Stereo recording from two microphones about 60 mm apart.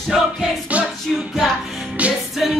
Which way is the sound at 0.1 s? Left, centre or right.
Centre.